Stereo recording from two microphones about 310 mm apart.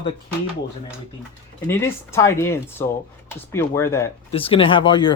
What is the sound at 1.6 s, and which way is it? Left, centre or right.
Speech, centre.